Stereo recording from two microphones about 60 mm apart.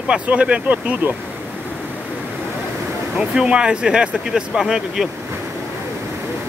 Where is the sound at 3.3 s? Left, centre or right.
Centre.